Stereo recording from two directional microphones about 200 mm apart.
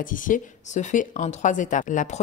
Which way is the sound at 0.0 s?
40° left (ahead or behind).